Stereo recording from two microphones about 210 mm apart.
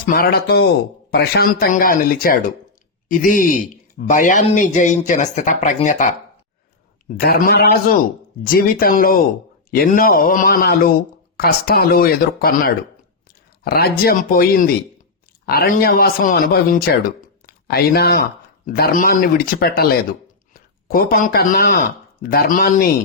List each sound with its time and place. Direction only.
0.0 s speech: 45° left (ahead or behind)
7.3 s speech: 45° left (ahead or behind)